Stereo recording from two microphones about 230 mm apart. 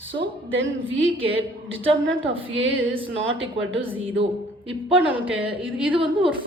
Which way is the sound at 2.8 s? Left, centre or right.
Right.